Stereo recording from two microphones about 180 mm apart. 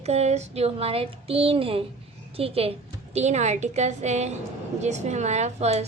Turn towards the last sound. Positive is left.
turn(degrees=-35)  # may be behind; listen again after turning